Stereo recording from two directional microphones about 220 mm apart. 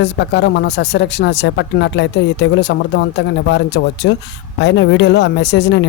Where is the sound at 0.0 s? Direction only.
50° left (ahead or behind).